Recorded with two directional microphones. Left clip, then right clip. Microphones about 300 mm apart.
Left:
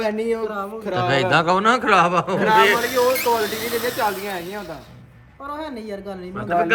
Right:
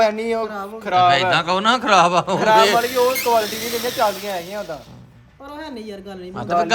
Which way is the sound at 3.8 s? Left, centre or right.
Right.